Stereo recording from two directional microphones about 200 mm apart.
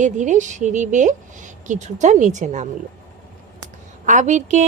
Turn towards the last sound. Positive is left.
turn(degrees=-35)  # may be behind; listen again after turning